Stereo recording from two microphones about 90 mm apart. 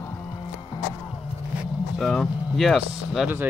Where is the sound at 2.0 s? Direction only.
Centre (ahead or behind).